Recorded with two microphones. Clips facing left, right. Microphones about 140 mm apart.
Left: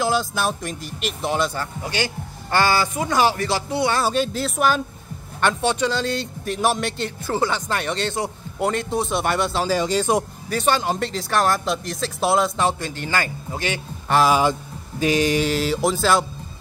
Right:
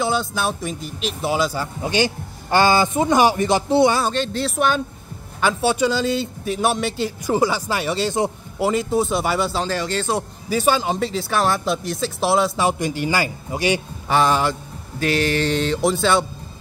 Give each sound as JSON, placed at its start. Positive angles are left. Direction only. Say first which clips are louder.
{"t": 0.0, "sound": "speech", "louder": "even", "side_deg": 0}
{"t": 1.8, "sound": "speech", "louder": "right 7 dB", "side_deg": -20}
{"t": 4.1, "sound": "a man's voice", "louder": "even", "side_deg": 5}
{"t": 9.7, "sound": "speech", "louder": "left 3 dB", "side_deg": 10}
{"t": 10.5, "sound": "speech", "louder": "right 2 dB", "side_deg": -5}
{"t": 12.7, "sound": "a man's voice", "louder": "right 4 dB", "side_deg": -15}
{"t": 14.0, "sound": "speech", "louder": "left 1 dB", "side_deg": 0}
{"t": 14.4, "sound": "speech", "louder": "left 2 dB", "side_deg": 15}